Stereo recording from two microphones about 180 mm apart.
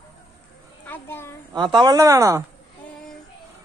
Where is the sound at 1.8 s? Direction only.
20° right (ahead or behind).